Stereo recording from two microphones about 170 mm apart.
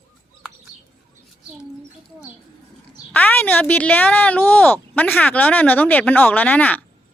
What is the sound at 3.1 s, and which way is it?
Speech, 10° left (ahead or behind).